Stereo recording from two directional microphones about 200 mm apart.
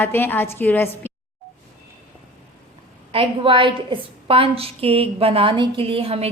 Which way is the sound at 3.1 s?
25° right (ahead or behind).